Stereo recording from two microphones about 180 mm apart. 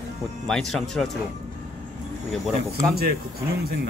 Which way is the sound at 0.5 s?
Centre (ahead or behind).